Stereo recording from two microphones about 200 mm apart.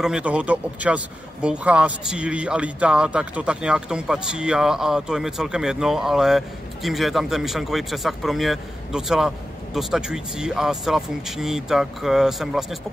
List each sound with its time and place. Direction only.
0.0 s speech: 5° right (ahead or behind)